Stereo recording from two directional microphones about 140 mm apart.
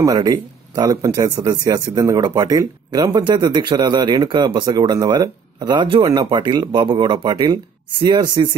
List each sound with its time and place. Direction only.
0.0 s speech: 30° right (ahead or behind)